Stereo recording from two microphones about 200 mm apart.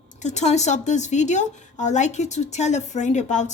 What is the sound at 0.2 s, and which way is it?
A woman's voice, 35° left (ahead or behind).